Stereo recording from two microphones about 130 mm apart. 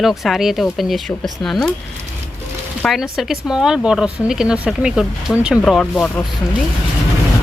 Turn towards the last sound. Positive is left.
turn(degrees=0)  # may be behind; listen again after turning